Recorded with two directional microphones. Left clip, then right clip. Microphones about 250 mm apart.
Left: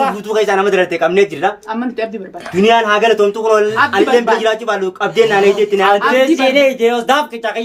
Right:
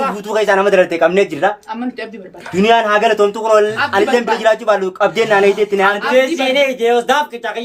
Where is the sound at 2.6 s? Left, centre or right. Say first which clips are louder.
Left 1 dB; right.